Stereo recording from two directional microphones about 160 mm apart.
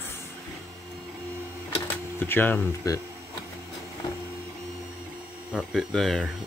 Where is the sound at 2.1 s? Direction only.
15° left (ahead or behind).